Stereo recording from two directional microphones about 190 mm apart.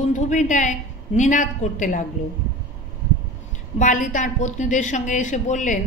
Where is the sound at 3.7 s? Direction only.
45° left (ahead or behind).